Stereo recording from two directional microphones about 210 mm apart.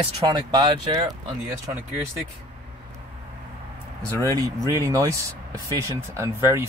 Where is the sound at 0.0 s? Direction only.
20° right (ahead or behind).